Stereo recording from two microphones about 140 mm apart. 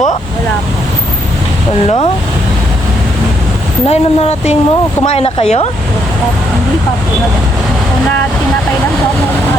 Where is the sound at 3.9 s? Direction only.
50° left (ahead or behind).